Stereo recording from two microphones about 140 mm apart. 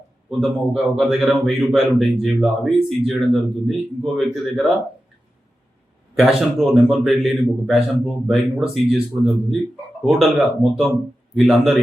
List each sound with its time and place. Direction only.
0.3 s a man's voice: 5° right (ahead or behind)
6.1 s a man's voice: centre (ahead or behind)